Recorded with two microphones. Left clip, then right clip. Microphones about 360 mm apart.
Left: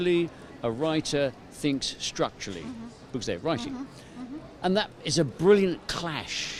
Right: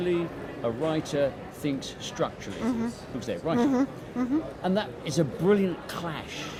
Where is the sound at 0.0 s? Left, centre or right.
Left.